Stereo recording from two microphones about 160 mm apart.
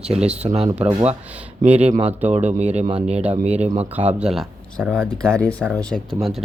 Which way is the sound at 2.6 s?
45° right (ahead or behind).